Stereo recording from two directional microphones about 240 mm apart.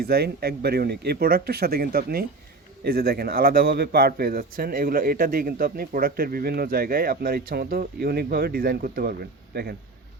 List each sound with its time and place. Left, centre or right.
0.0 s a man's voice: right